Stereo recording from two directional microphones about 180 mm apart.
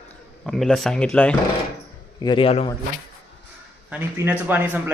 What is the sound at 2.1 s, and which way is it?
Speech, 25° left (ahead or behind).